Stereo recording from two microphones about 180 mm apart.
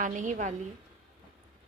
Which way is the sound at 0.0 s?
45° right (ahead or behind).